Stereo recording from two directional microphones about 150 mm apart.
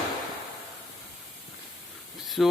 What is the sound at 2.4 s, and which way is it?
Speech, centre (ahead or behind).